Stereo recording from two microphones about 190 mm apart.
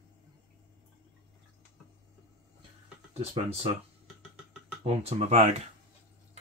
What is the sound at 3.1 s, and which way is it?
Speech, 30° right (ahead or behind).